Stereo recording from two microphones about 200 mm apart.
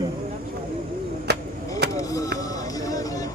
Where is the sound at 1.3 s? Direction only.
55° right (ahead or behind).